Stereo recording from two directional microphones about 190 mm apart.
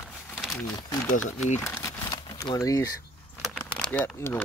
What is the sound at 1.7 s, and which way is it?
Crumpling, 15° left (ahead or behind).